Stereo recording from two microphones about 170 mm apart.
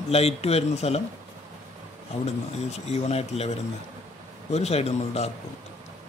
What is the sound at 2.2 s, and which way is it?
Speech, 40° left (ahead or behind).